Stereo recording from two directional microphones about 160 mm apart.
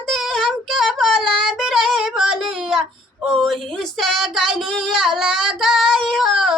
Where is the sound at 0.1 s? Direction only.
Centre (ahead or behind).